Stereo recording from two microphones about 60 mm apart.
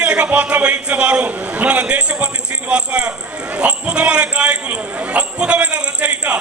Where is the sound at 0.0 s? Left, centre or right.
Centre.